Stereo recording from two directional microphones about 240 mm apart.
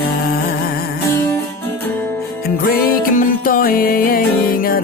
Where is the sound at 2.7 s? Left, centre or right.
Left.